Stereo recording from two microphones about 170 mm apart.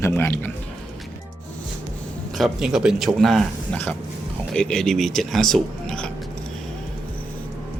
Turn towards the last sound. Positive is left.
turn(degrees=5)  # may be behind; listen again after turning